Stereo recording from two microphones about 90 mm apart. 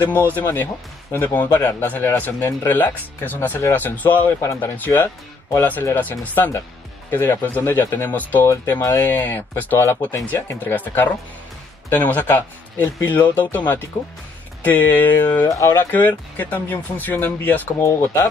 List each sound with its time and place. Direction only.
0.3 s speech: 20° left (ahead or behind)
4.4 s speech: 35° left (ahead or behind)
14.6 s speech: 20° left (ahead or behind)
15.4 s speech: 35° left (ahead or behind)
15.9 s speech: 20° left (ahead or behind)
17.8 s speech: 35° left (ahead or behind)